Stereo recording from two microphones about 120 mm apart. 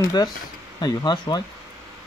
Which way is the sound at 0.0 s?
35° left (ahead or behind).